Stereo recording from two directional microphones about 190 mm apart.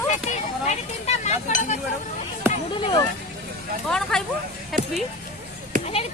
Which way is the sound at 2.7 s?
25° left (ahead or behind).